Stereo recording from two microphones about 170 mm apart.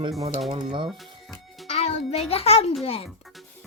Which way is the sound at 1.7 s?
40° left (ahead or behind).